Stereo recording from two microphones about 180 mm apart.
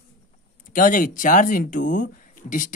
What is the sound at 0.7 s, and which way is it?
Speech, 50° left (ahead or behind).